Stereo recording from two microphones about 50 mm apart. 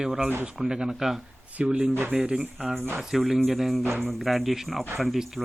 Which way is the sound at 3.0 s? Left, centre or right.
Centre.